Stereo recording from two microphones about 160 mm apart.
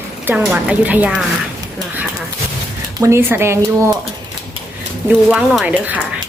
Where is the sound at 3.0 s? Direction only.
15° right (ahead or behind).